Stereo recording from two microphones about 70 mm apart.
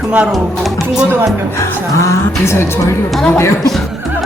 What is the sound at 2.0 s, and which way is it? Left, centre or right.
Speech, left.